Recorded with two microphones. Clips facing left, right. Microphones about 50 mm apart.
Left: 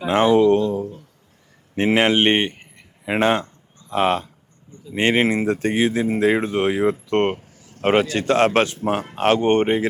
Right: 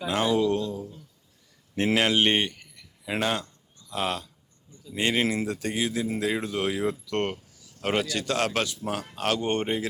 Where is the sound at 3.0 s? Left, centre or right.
Left.